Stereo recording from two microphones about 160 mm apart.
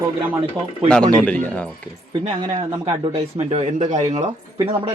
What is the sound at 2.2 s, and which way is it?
Speech, 35° right (ahead or behind).